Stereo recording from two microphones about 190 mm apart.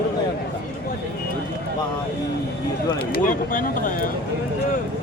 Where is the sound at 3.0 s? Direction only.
50° left (ahead or behind).